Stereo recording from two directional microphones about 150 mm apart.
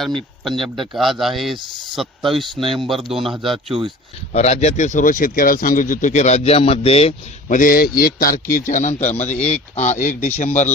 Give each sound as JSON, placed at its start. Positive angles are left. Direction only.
{"t": 0.0, "sound": "speech", "side_deg": 0}
{"t": 2.5, "sound": "speech", "side_deg": -35}
{"t": 2.8, "sound": "speech", "side_deg": 0}
{"t": 3.4, "sound": "speech", "side_deg": -35}
{"t": 4.3, "sound": "speech", "side_deg": 45}
{"t": 7.5, "sound": "a man's voice", "side_deg": 70}